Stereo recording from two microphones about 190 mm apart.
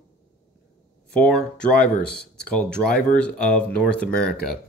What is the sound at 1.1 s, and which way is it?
Speech, 5° left (ahead or behind).